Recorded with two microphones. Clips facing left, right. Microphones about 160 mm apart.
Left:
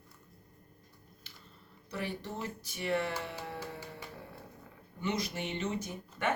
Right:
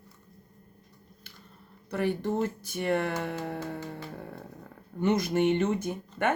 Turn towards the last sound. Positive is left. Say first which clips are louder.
# right 6 dB
turn(degrees=-55)  # may be behind; listen again after turning